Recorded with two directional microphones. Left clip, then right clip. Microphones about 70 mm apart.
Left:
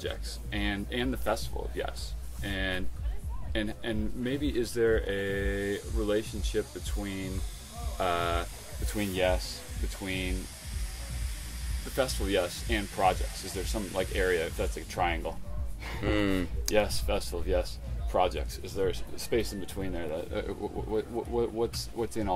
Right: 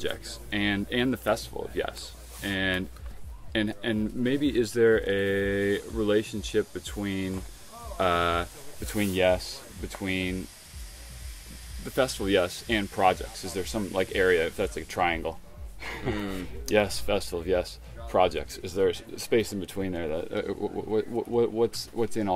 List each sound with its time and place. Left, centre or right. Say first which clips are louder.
0.0 s speech: right 4 dB; right
11.9 s speech: right 4 dB; right
16.1 s speech: left 6 dB; left
16.7 s speech: right 4 dB; right